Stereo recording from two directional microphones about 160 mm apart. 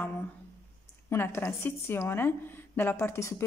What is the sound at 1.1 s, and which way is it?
Speech, 15° left (ahead or behind).